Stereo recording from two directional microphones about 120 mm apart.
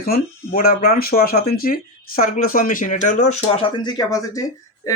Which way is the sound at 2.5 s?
90° left.